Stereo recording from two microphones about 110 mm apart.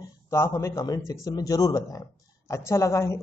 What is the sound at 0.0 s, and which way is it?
A man's voice, 25° left (ahead or behind).